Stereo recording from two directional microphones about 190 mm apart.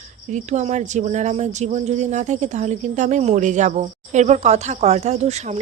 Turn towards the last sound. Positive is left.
turn(degrees=-35)  # may be behind; listen again after turning